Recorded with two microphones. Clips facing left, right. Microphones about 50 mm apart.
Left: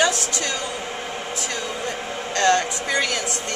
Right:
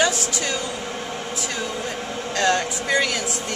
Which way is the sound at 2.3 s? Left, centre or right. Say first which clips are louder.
Left 2 dB; centre.